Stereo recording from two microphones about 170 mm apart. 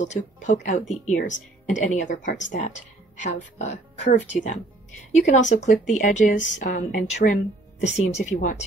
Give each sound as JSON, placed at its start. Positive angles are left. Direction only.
{"t": 0.0, "sound": "speech", "side_deg": 45}